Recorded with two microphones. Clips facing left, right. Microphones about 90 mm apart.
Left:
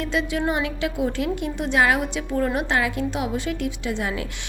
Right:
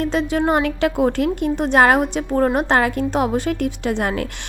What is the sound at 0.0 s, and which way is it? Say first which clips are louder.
A woman's voice: right 5 dB; 45° right (ahead or behind).